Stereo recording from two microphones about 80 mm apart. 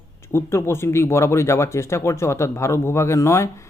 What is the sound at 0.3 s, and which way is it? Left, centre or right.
Speech, left.